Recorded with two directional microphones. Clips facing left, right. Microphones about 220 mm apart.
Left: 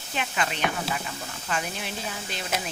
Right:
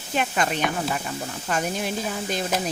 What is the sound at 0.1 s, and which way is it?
A woman's voice, 45° right (ahead or behind).